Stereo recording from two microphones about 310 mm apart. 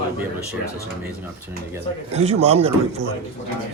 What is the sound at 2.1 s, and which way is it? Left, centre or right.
Speech, centre.